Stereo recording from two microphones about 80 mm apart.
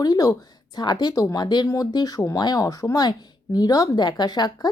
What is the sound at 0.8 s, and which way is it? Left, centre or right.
Speech, left.